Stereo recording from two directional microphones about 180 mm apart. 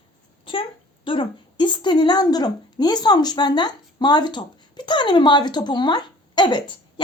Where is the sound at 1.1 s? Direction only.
25° left (ahead or behind).